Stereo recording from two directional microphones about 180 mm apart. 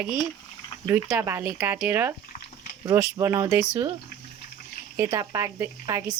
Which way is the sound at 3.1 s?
15° right (ahead or behind).